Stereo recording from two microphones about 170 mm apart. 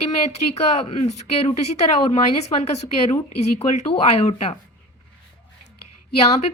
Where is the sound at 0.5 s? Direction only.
40° left (ahead or behind).